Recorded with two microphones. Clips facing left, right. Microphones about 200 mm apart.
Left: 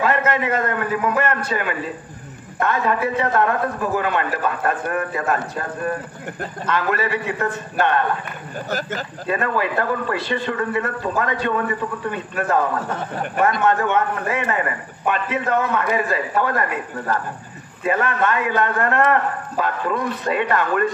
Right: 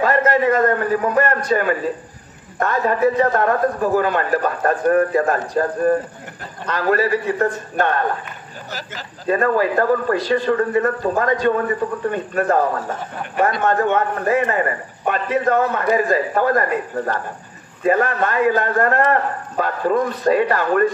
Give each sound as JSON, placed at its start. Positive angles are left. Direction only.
{"t": 0.0, "sound": "a man's voice", "side_deg": -35}
{"t": 8.6, "sound": "speech", "side_deg": 50}
{"t": 9.3, "sound": "a man's voice", "side_deg": -35}